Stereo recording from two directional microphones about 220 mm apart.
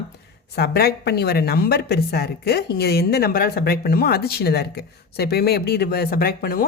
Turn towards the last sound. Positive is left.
turn(degrees=40)  # may be behind; listen again after turning